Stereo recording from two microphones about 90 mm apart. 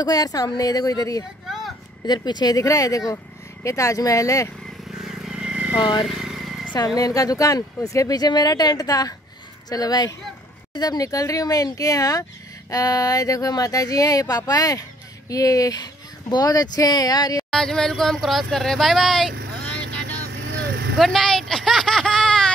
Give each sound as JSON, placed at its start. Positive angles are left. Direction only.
{"t": 0.0, "sound": "speech", "side_deg": 45}
{"t": 5.0, "sound": "vehicle", "side_deg": -5}
{"t": 5.8, "sound": "speech", "side_deg": 60}
{"t": 6.0, "sound": "vehicle", "side_deg": -5}
{"t": 7.0, "sound": "speech", "side_deg": 40}
{"t": 17.5, "sound": "speech", "side_deg": 5}
{"t": 21.0, "sound": "a sound", "side_deg": 0}